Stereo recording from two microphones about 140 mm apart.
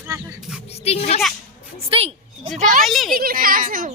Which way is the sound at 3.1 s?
90° right.